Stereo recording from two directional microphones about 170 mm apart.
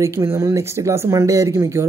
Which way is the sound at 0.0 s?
15° right (ahead or behind).